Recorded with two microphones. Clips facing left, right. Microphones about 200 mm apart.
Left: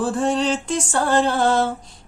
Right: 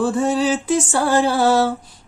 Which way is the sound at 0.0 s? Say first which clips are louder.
Right 2 dB; centre (ahead or behind).